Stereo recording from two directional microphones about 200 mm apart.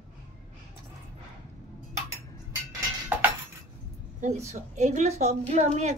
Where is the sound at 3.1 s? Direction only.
10° right (ahead or behind).